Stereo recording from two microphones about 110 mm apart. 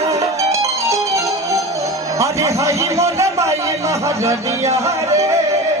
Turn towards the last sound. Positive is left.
turn(degrees=-30)  # may be behind; listen again after turning